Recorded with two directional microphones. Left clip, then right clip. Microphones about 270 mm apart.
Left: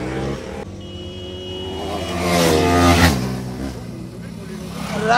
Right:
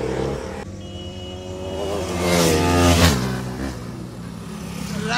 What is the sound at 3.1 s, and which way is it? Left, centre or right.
Vehicle, centre.